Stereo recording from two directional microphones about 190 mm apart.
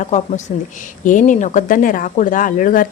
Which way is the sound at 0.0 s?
40° left (ahead or behind).